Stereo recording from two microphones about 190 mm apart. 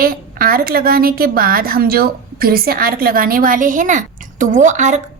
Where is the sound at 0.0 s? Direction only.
50° right (ahead or behind).